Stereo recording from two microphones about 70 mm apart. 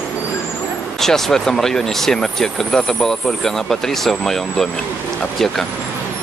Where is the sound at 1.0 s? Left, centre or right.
Centre.